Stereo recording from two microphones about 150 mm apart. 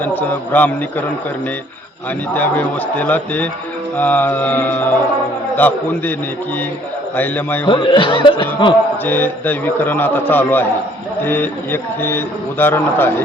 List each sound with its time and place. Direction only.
0.0 s a man's voice: 10° left (ahead or behind)
2.3 s a man's voice: 10° left (ahead or behind)
7.2 s a man's voice: 15° left (ahead or behind)
7.7 s speech: 35° left (ahead or behind)
9.0 s a man's voice: 15° left (ahead or behind)